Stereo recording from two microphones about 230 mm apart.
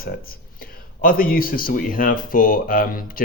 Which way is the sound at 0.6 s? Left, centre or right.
Left.